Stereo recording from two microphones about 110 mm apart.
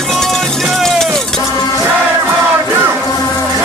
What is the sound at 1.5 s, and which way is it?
Music, 35° left (ahead or behind).